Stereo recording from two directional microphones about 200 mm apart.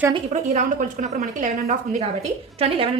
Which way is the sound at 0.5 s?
40° right (ahead or behind).